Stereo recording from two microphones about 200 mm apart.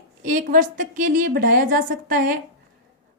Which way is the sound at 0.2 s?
40° right (ahead or behind).